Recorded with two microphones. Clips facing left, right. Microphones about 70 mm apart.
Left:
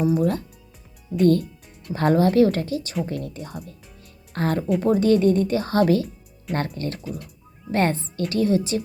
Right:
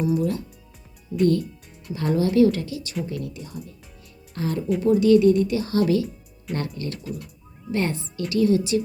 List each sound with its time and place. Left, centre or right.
0.0 s speech: left